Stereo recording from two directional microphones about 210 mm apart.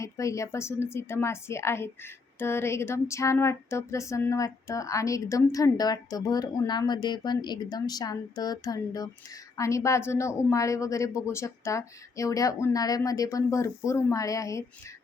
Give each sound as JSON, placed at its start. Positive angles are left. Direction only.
{"t": 0.0, "sound": "a woman's voice", "side_deg": 15}